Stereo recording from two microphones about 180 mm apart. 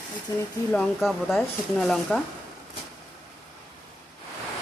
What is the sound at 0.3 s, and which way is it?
Speech, 20° left (ahead or behind).